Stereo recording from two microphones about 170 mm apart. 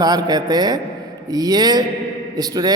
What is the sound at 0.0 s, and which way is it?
A man's voice, 25° right (ahead or behind).